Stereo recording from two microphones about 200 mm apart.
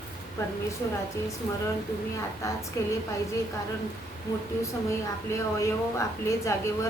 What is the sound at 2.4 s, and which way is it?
Speech, 15° left (ahead or behind).